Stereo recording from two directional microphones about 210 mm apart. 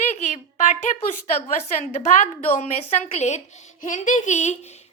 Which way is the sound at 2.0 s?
35° left (ahead or behind).